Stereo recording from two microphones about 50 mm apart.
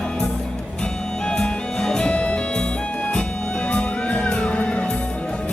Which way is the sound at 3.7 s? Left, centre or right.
Left.